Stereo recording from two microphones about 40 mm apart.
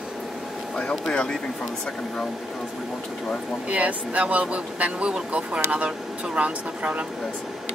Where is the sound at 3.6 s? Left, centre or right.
Right.